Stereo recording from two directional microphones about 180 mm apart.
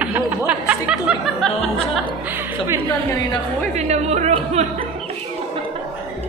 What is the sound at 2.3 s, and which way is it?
Speech, 15° right (ahead or behind).